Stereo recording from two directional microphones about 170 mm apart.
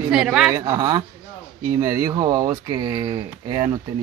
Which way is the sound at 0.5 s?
20° right (ahead or behind).